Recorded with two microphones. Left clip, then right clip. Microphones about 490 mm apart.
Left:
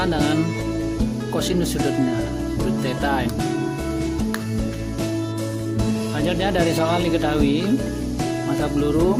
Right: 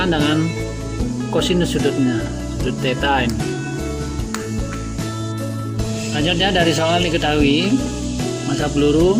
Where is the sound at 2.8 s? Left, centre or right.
Left.